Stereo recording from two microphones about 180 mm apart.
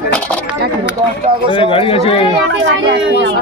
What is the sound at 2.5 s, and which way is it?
Speech, 75° right (ahead or behind).